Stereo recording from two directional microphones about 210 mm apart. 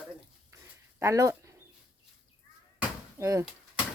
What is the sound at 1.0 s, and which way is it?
Speech, 15° right (ahead or behind).